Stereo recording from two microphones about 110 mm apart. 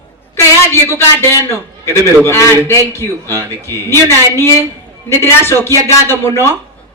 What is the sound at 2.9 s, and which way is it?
Speech, 25° left (ahead or behind).